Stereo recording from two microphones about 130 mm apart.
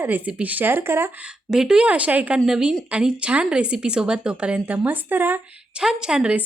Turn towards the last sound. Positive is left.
turn(degrees=-5)  # may be behind; listen again after turning